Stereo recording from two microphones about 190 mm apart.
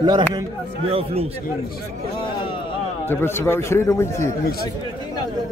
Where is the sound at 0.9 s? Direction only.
30° right (ahead or behind).